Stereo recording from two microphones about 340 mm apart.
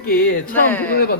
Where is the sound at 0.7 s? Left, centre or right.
Centre.